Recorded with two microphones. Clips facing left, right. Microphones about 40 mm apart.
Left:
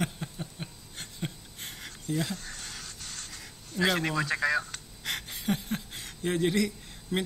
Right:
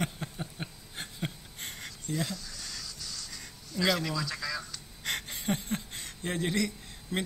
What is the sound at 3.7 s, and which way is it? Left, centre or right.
Speech, left.